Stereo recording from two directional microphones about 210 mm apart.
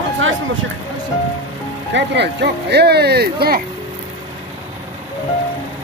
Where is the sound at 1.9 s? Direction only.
55° right (ahead or behind).